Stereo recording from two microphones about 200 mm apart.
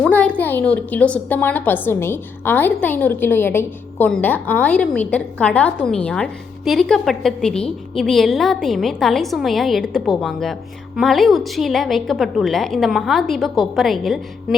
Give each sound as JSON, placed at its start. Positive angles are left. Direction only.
{"t": 0.0, "sound": "a woman's voice", "side_deg": 5}